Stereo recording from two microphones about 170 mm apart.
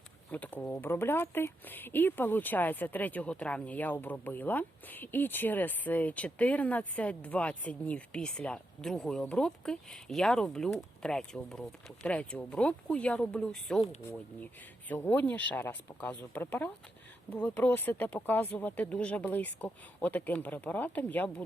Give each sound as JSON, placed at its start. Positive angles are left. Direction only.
{"t": 0.3, "sound": "speech", "side_deg": 10}